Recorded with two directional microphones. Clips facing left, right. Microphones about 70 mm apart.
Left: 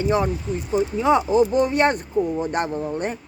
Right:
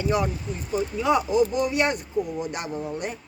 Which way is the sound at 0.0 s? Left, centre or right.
Left.